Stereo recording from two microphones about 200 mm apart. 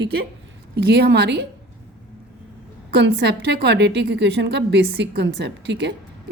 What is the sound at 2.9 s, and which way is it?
A woman's voice, 60° right (ahead or behind).